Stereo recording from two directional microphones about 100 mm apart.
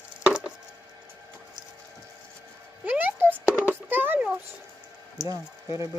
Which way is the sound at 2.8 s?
20° right (ahead or behind).